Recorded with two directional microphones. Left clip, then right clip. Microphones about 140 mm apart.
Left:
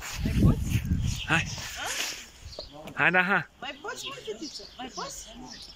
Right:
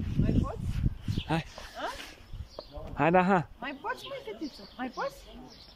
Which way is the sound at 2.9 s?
30° right (ahead or behind).